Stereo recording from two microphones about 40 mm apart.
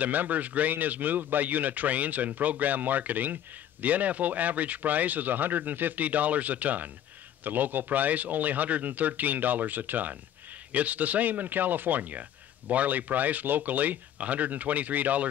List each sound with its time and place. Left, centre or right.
0.0 s speech: right